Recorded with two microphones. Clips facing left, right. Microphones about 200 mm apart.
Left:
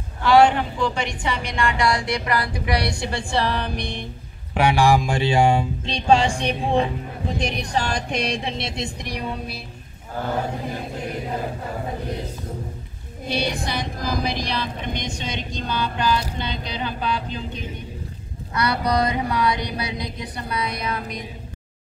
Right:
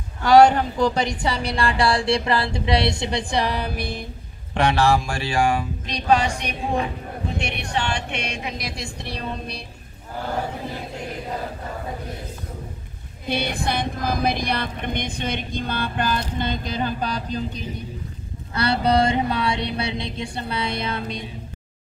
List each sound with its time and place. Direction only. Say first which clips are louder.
0.2 s speech: right 2 dB; 40° right (ahead or behind); by 4.0 s 5° right (ahead or behind)
4.6 s speech: left 1 dB; 10° left (ahead or behind)
13.3 s a woman's voice: right 1 dB; 55° right (ahead or behind)
18.5 s speech: right 2 dB; 30° right (ahead or behind)